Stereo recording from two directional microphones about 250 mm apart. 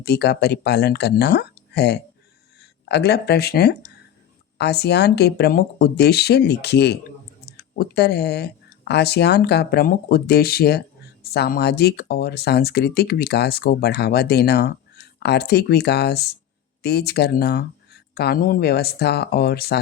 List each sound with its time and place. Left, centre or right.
0.0 s speech: left